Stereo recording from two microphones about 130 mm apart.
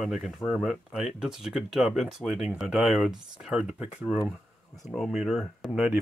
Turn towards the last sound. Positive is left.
turn(degrees=0)  # may be behind; listen again after turning